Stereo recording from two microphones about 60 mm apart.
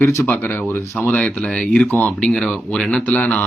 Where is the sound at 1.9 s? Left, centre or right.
Left.